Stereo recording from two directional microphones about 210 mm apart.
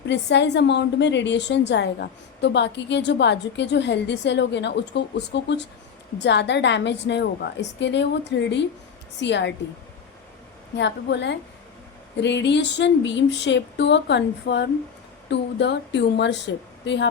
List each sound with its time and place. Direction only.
0.1 s a woman's voice: 55° left (ahead or behind)
10.8 s a woman's voice: 55° left (ahead or behind)